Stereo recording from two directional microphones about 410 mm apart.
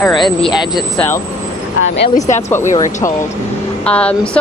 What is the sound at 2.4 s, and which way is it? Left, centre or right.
Speech, centre.